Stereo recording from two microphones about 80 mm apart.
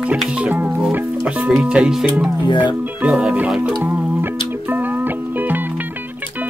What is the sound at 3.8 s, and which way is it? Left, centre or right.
Music, right.